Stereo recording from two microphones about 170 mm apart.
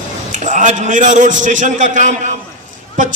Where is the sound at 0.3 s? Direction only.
45° right (ahead or behind).